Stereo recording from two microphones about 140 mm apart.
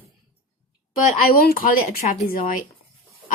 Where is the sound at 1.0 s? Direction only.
90° left.